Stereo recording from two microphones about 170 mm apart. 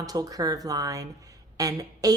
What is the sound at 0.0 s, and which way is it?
Speech, 20° right (ahead or behind).